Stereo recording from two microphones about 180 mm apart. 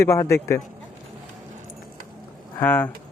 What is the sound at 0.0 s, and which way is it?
Speech, 15° left (ahead or behind).